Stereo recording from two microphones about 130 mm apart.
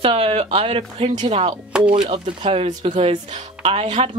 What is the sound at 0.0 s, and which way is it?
Speech, 45° right (ahead or behind).